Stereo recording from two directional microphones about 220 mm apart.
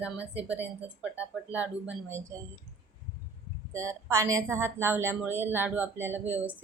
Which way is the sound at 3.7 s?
15° right (ahead or behind).